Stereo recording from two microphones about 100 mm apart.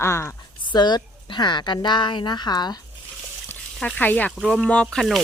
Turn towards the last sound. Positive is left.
turn(degrees=5)  # may be behind; listen again after turning